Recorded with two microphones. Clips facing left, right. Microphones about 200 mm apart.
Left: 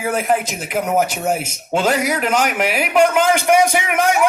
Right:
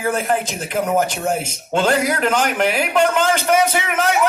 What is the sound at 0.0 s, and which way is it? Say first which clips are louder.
Speech: left 1 dB; 10° left (ahead or behind).